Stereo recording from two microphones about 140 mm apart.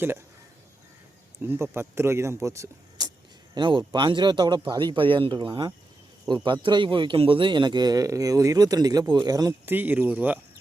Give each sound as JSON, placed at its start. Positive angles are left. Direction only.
{"t": 1.4, "sound": "speech", "side_deg": -15}
{"t": 3.5, "sound": "a man's voice", "side_deg": -35}
{"t": 9.6, "sound": "speech", "side_deg": -15}